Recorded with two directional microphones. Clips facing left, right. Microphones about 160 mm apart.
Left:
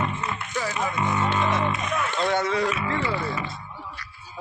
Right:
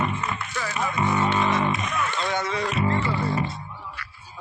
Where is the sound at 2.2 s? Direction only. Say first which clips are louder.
Left 3 dB; 55° left (ahead or behind).